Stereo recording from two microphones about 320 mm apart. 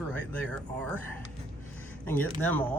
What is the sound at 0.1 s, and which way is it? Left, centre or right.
Speech, centre.